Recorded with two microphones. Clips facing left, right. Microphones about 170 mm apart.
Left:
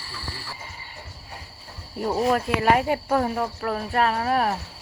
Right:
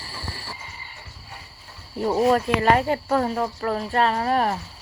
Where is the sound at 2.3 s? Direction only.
5° left (ahead or behind).